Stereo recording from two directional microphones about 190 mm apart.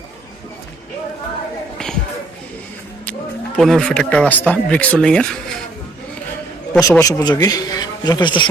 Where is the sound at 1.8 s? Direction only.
5° left (ahead or behind).